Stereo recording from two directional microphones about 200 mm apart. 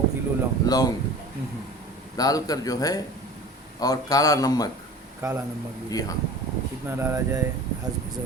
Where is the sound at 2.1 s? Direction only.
20° left (ahead or behind).